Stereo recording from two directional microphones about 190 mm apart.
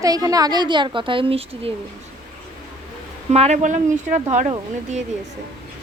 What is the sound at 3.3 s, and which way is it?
Speech, 35° right (ahead or behind).